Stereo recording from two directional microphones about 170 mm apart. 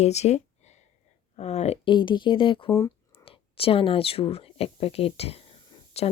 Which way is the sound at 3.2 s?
35° left (ahead or behind).